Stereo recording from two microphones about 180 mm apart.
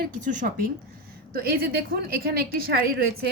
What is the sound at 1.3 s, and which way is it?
A woman's voice, 55° right (ahead or behind).